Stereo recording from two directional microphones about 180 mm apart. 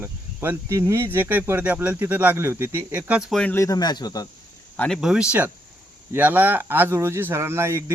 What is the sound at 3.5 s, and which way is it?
Speech, 20° left (ahead or behind).